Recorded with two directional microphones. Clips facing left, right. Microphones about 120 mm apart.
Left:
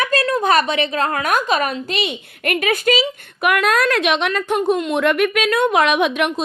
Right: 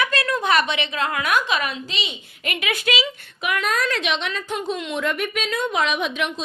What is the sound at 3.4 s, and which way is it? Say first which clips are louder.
A woman's voice: left 7 dB; 65° left (ahead or behind).